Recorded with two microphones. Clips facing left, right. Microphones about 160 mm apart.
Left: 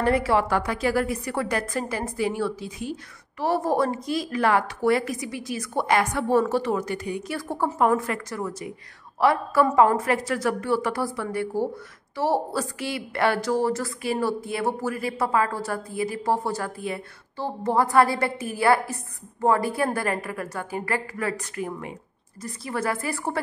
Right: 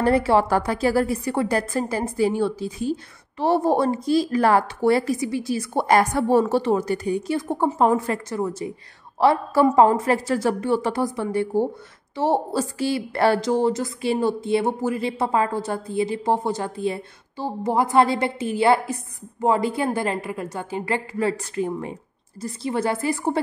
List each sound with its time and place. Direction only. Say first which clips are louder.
0.0 s a woman's voice: right 3 dB; 30° right (ahead or behind)
7.3 s a woman's voice: right 1 dB; 20° right (ahead or behind)
13.4 s speech: right 3 dB; 20° right (ahead or behind)
17.4 s speech: right 1 dB; 15° right (ahead or behind)